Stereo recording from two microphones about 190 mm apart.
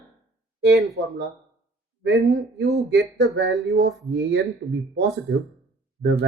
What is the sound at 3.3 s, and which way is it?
Speech, 65° right (ahead or behind).